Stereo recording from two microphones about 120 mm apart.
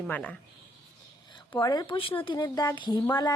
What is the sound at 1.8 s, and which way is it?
Speech, 50° left (ahead or behind).